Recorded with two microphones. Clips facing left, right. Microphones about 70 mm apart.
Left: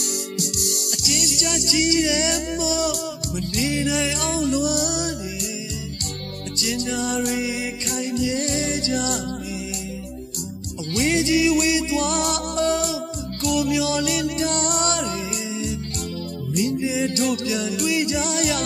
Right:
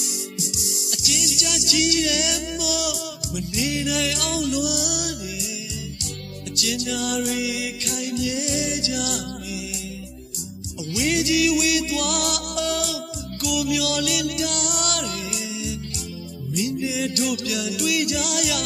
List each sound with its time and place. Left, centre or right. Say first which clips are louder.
0.0 s music: left 4 dB; left
0.8 s music: right 1 dB; centre
1.7 s music: left 2 dB; left
2.9 s music: left 3 dB; centre
3.6 s music: left 2 dB; left
6.8 s music: left 2 dB; left
8.5 s music: left 2 dB; left
11.1 s music: left 1 dB; left
16.7 s music: left 2 dB; left
17.8 s music: left 1 dB; left